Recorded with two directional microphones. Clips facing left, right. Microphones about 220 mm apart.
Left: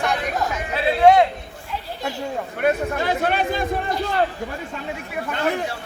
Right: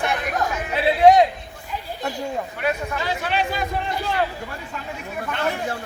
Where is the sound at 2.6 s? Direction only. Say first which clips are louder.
Left 7 dB; 50° left (ahead or behind).